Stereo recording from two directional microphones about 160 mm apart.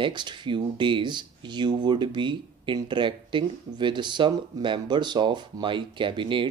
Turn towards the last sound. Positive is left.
turn(degrees=-30)  # may be behind; listen again after turning